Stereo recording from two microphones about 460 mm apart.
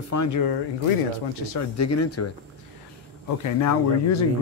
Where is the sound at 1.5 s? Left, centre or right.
Left.